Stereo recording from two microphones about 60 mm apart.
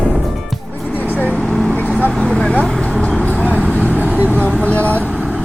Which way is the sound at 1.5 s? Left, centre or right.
Centre.